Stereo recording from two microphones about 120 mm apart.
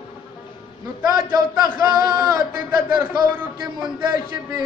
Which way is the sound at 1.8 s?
30° right (ahead or behind).